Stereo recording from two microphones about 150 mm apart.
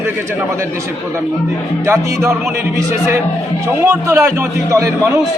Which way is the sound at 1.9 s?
15° right (ahead or behind).